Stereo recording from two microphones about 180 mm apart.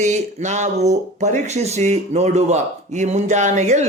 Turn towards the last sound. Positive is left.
turn(degrees=-40)  # may be behind; listen again after turning